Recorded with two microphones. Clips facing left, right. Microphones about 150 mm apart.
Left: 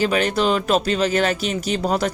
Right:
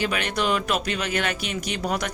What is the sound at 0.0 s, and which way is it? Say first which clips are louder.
Speech: left 6 dB; 35° left (ahead or behind).